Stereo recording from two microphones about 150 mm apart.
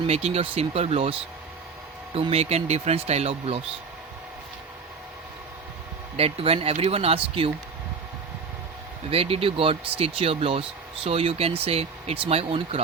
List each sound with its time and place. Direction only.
0.1 s speech: 40° right (ahead or behind)
2.1 s speech: 40° right (ahead or behind)
6.1 s speech: 40° right (ahead or behind)
9.0 s speech: 40° right (ahead or behind)